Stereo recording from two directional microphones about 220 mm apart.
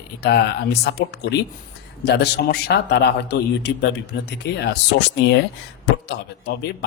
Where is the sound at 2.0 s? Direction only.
50° left (ahead or behind).